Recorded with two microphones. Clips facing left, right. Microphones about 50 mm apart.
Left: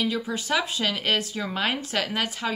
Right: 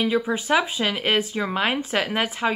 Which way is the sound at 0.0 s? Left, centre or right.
Centre.